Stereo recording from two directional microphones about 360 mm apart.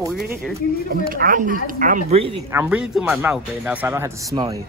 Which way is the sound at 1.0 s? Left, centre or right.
Right.